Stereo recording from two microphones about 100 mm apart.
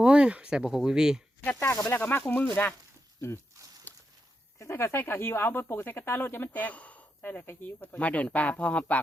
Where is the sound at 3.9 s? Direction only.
20° left (ahead or behind).